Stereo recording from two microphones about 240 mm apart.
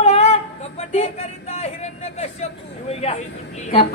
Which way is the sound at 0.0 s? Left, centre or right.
Left.